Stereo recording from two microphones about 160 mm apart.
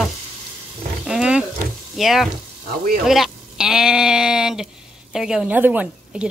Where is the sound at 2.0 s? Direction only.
Centre (ahead or behind).